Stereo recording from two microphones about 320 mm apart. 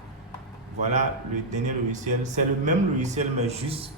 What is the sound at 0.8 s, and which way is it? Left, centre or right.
Speech, right.